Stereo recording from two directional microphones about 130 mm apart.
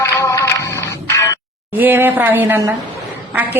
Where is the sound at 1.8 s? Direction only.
15° right (ahead or behind).